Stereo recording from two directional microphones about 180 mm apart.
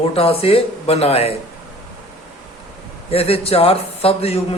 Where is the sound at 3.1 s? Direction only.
35° left (ahead or behind).